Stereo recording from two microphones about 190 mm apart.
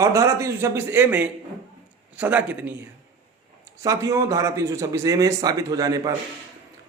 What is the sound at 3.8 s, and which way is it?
Speech, 15° right (ahead or behind).